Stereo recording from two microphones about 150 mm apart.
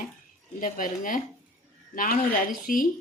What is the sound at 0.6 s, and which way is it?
Speech, 65° left (ahead or behind).